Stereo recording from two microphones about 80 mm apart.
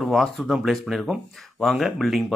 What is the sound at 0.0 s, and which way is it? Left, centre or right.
Speech, centre.